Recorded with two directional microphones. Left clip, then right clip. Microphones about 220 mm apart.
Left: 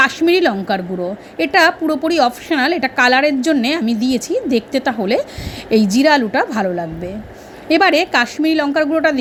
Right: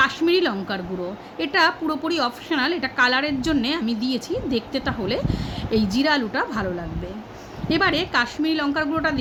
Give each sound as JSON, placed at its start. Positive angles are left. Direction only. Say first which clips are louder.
{"t": 0.0, "sound": "a woman's voice", "louder": "left 6 dB", "side_deg": 25}